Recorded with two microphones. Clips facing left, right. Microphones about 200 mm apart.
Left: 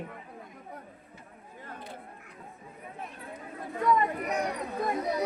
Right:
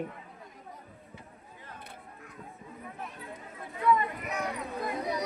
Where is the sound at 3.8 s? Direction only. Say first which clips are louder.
Left 1 dB; 40° left (ahead or behind).